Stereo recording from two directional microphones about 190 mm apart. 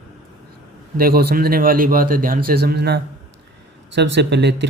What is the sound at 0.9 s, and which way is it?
A man's voice, 50° right (ahead or behind).